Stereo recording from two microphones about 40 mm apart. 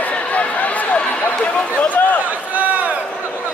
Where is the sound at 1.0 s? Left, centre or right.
Left.